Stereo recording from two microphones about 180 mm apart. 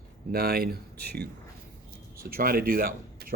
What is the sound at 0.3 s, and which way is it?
Speech, 55° right (ahead or behind).